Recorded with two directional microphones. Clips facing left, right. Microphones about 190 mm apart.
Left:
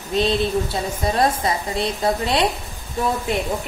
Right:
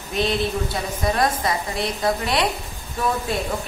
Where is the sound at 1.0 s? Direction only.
25° left (ahead or behind).